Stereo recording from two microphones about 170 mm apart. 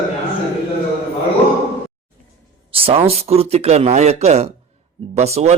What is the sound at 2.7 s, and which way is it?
A man's voice, 35° right (ahead or behind).